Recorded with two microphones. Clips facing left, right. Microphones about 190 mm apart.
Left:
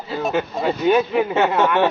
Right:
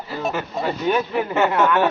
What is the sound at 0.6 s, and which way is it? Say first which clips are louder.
Speech: left 4 dB; 15° left (ahead or behind).